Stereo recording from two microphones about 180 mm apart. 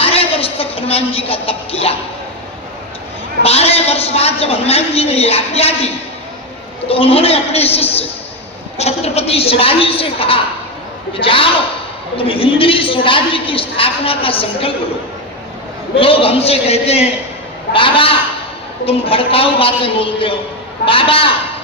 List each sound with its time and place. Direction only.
0.0 s a sound: 30° left (ahead or behind)
3.4 s a woman's voice: 35° left (ahead or behind)
16.0 s a woman's voice: 30° left (ahead or behind)